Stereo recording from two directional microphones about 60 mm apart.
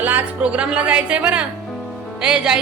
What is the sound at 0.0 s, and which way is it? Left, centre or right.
A woman's voice, right.